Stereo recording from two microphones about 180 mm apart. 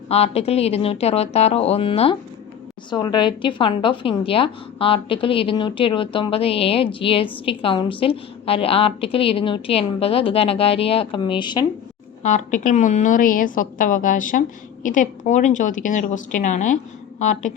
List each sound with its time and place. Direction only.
0.1 s a woman's voice: 35° left (ahead or behind)
12.2 s a woman's voice: 45° left (ahead or behind)